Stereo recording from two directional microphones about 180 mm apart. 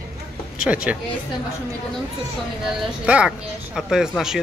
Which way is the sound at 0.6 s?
5° right (ahead or behind).